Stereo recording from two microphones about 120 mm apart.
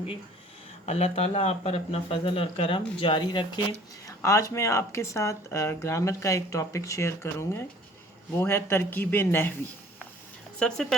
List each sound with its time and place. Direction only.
0.9 s speech: 65° left (ahead or behind); by 3.6 s 40° left (ahead or behind)
4.0 s speech: 25° left (ahead or behind)
10.6 s speech: 5° left (ahead or behind)